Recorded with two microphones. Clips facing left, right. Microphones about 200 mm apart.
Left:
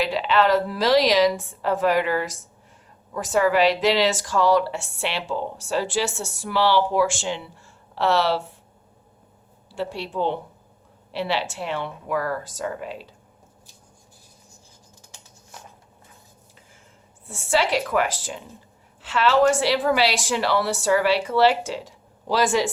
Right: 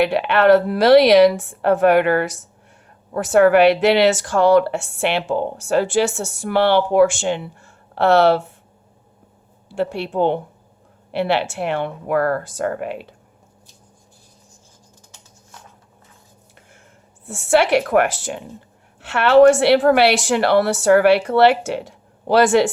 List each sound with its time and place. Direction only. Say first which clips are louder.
0.0 s speech: right 5 dB; 60° right (ahead or behind)
9.6 s speech: right 7 dB; 60° right (ahead or behind)
17.2 s speech: right 6 dB; 70° right (ahead or behind)